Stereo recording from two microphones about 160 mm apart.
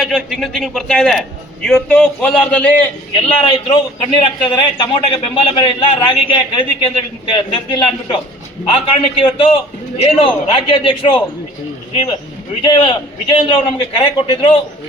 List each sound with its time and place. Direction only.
0.0 s a man's voice: centre (ahead or behind)
3.2 s a man's voice: 30° left (ahead or behind)
12.6 s a man's voice: 30° left (ahead or behind)